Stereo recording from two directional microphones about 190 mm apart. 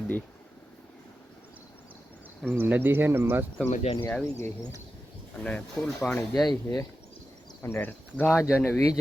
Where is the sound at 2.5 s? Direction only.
10° right (ahead or behind).